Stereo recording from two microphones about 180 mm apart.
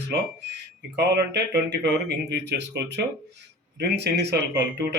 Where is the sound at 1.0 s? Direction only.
70° right (ahead or behind).